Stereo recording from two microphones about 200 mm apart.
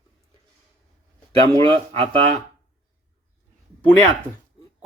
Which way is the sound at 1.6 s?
25° right (ahead or behind).